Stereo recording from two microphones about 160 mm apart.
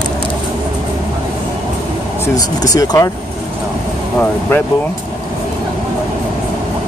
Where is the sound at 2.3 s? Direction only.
25° left (ahead or behind).